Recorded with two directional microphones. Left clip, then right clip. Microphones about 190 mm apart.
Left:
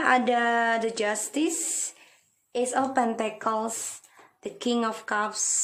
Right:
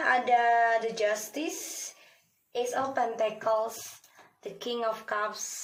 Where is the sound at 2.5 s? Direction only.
50° left (ahead or behind).